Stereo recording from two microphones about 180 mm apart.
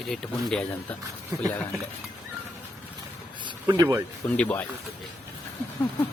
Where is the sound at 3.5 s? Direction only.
25° right (ahead or behind).